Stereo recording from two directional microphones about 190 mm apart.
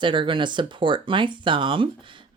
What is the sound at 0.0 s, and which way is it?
Speech, 25° right (ahead or behind).